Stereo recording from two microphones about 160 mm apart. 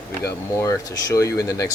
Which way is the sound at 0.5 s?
20° left (ahead or behind).